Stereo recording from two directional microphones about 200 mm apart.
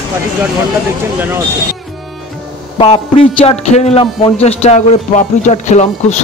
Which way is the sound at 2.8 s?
25° left (ahead or behind).